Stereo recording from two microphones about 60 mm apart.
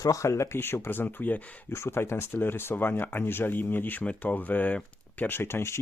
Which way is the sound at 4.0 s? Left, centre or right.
Left.